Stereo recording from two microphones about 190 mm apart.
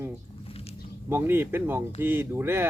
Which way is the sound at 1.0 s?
10° right (ahead or behind).